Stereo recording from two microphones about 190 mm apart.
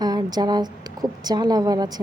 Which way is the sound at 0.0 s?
20° right (ahead or behind).